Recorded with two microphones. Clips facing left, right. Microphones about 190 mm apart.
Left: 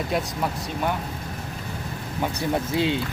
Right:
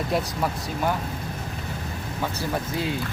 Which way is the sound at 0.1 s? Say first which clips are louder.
Right 2 dB; centre (ahead or behind).